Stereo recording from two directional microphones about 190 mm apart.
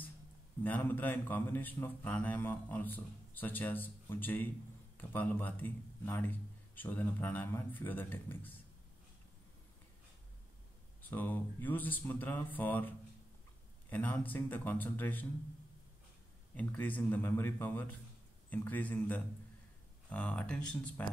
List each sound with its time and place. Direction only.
0.7 s a man's voice: 10° left (ahead or behind)
11.0 s a man's voice: 10° left (ahead or behind)
16.5 s a man's voice: 10° left (ahead or behind)